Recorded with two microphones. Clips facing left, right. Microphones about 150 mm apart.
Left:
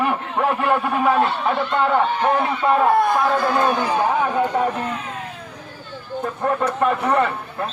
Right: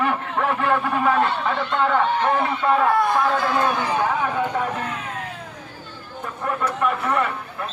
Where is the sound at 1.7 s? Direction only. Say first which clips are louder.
Even; 15° left (ahead or behind).